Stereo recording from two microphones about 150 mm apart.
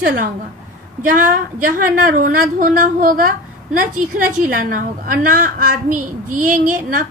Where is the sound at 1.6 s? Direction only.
70° right (ahead or behind).